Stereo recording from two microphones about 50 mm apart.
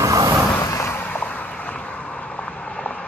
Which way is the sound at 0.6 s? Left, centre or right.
Left.